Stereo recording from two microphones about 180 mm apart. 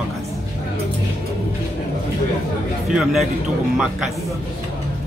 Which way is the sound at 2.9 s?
Centre (ahead or behind).